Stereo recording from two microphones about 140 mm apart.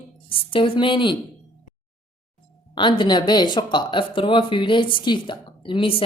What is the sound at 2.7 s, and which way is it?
Speech, 35° left (ahead or behind).